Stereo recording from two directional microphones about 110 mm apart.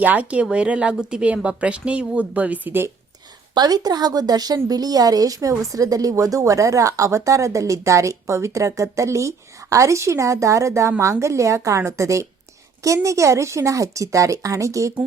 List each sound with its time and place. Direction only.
0.0 s speech: 15° right (ahead or behind)
3.5 s a woman's voice: 40° right (ahead or behind)